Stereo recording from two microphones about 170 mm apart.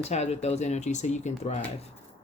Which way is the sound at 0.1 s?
40° left (ahead or behind).